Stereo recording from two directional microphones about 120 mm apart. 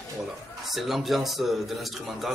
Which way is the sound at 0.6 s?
Centre (ahead or behind).